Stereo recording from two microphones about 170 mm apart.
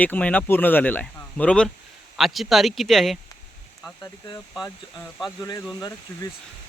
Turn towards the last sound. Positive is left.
turn(degrees=0)  # may be behind; listen again after turning